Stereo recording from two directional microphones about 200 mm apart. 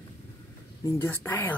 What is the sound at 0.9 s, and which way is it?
Speech, 10° left (ahead or behind).